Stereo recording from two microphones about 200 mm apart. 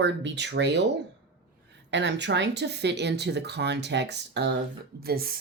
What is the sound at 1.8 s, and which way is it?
Speech, 60° right (ahead or behind).